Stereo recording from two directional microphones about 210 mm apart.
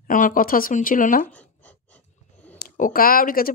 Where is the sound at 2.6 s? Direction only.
40° left (ahead or behind).